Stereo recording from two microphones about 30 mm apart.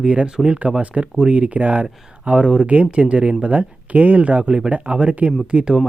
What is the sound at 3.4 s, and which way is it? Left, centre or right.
Speech, right.